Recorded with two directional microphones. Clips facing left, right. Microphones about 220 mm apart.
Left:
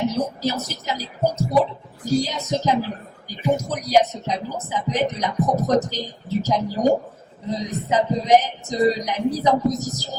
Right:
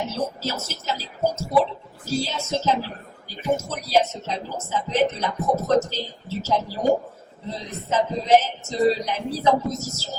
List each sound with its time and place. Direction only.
0.1 s speech: 15° left (ahead or behind)